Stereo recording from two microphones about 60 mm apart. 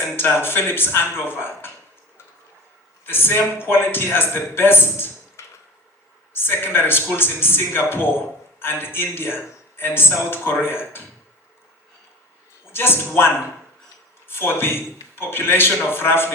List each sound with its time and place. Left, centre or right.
0.2 s a man's voice: left
3.1 s a man's voice: left
12.7 s a man's voice: left